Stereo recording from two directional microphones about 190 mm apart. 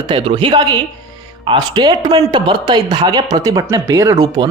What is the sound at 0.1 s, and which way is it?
Speech, 25° right (ahead or behind).